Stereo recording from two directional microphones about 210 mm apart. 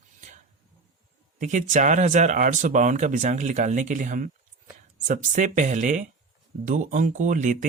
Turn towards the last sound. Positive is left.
turn(degrees=-35)  # may be behind; listen again after turning